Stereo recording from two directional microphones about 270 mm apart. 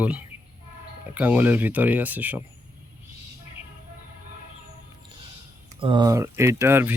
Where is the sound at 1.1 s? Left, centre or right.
Centre.